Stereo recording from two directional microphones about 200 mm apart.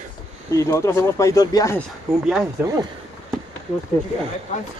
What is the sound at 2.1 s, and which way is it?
Speech, 5° right (ahead or behind).